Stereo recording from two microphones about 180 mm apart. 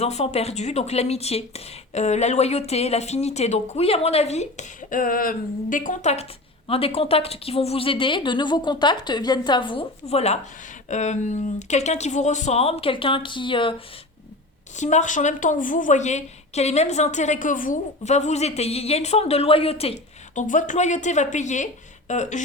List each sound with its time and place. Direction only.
0.0 s a woman's voice: 35° left (ahead or behind)
14.8 s a woman's voice: 40° left (ahead or behind)